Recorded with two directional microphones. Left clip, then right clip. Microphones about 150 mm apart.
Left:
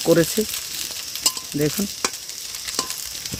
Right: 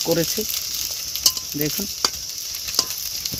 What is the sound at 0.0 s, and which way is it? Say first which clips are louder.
Speech: left 4 dB; 55° left (ahead or behind).